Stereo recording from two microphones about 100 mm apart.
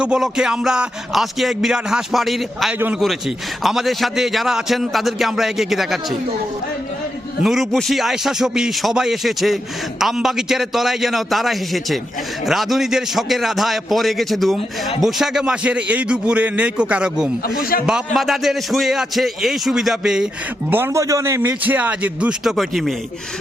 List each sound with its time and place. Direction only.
0.0 s a man's voice: 5° right (ahead or behind)
2.7 s a man's voice: 20° right (ahead or behind)
3.0 s a man's voice: centre (ahead or behind)
7.4 s a man's voice: centre (ahead or behind)
20.7 s a man's voice: 20° right (ahead or behind)
21.6 s speech: 15° right (ahead or behind)
22.4 s a man's voice: centre (ahead or behind)